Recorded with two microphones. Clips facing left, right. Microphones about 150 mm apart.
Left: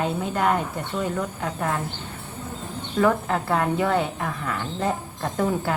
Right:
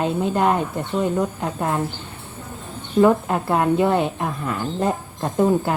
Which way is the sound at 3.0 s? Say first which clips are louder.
Right 5 dB; 20° right (ahead or behind).